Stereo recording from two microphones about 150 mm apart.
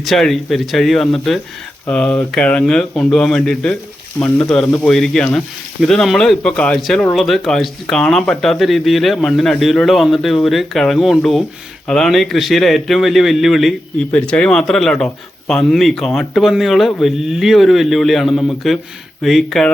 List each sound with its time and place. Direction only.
0.0 s a man's voice: centre (ahead or behind)